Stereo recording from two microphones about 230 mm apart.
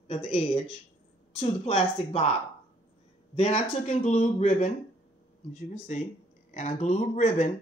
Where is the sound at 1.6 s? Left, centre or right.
Left.